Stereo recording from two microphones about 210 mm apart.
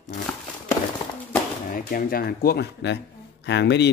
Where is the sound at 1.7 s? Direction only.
45° left (ahead or behind).